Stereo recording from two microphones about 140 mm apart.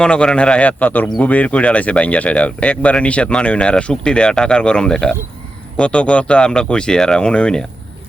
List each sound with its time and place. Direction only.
0.0 s speech: 5° left (ahead or behind)